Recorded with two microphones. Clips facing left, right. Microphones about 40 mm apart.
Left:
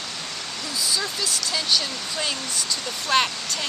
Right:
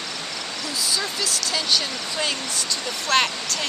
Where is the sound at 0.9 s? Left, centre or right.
Centre.